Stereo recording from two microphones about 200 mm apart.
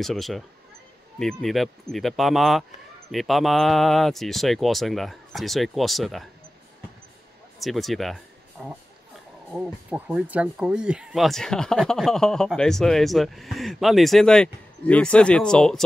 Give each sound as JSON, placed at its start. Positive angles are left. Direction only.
{"t": 0.0, "sound": "speech", "side_deg": 0}
{"t": 7.6, "sound": "speech", "side_deg": 0}